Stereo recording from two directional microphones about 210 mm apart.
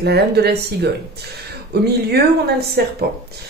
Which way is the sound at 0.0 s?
50° right (ahead or behind).